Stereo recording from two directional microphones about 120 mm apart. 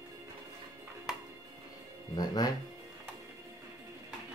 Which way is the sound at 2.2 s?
35° left (ahead or behind).